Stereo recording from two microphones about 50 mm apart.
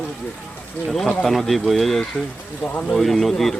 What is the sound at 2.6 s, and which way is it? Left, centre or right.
Speech, left.